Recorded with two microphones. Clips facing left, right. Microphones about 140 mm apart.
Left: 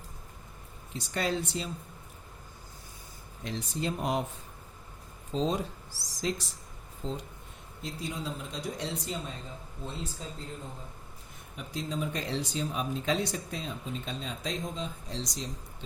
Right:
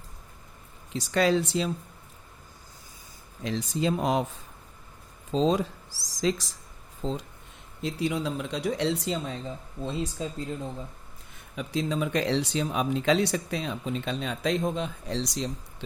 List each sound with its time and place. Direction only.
0.9 s speech: 90° right
3.4 s speech: 90° right
5.3 s speech: 90° right
7.8 s speech: 80° right
9.8 s speech: 90° right
11.5 s speech: 90° right; by 15.4 s 70° right (ahead or behind)